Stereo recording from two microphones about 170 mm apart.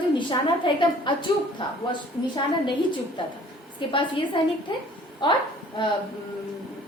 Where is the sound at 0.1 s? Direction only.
30° left (ahead or behind).